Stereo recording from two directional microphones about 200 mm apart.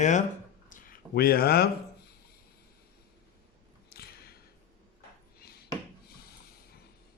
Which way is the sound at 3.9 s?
50° left (ahead or behind).